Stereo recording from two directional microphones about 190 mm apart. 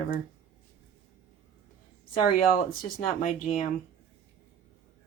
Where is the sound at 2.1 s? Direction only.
45° left (ahead or behind).